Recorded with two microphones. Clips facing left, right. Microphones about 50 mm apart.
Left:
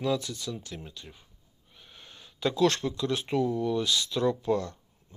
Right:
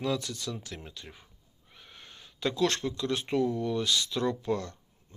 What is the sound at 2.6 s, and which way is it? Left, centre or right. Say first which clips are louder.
Speech: left 4 dB; left.